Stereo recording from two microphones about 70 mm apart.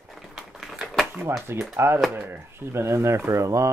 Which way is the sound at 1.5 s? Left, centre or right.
Right.